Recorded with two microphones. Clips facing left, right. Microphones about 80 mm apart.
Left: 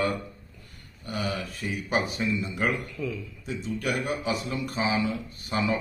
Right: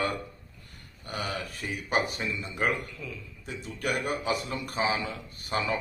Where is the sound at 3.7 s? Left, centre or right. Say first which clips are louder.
Even; right.